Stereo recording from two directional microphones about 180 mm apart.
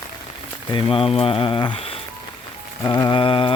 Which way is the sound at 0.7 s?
25° left (ahead or behind).